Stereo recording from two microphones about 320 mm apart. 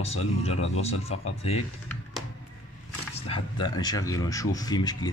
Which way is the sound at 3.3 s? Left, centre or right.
Centre.